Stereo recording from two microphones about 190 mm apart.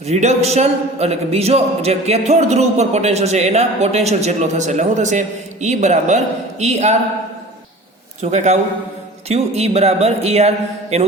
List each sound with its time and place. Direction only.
0.1 s a man's voice: 35° right (ahead or behind)
8.2 s a man's voice: 35° right (ahead or behind)